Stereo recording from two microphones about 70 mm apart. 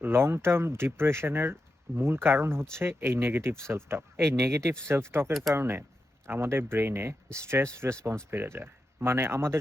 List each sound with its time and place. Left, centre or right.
0.0 s speech: right